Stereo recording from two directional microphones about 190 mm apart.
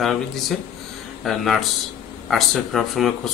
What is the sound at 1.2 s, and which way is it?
Speech, centre (ahead or behind).